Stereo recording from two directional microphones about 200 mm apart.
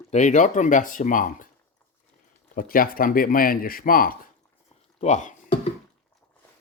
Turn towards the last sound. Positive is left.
turn(degrees=35)  # may be behind; listen again after turning